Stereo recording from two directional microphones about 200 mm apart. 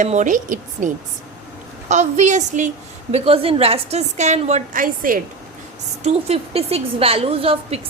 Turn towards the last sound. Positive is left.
turn(degrees=-30)  # may be behind; listen again after turning